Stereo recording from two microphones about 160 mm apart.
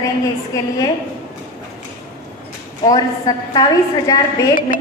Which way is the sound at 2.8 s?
25° left (ahead or behind).